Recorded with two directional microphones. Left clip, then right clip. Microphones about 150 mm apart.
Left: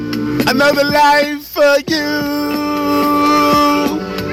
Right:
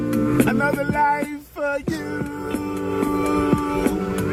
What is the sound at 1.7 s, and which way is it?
Music, 80° left.